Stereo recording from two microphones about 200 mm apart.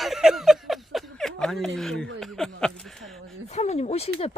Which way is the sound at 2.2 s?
5° left (ahead or behind).